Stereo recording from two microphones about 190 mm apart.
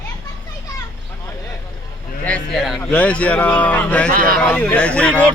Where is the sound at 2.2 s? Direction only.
5° left (ahead or behind).